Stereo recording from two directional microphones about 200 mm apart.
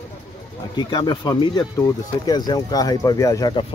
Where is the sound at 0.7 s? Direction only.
20° left (ahead or behind).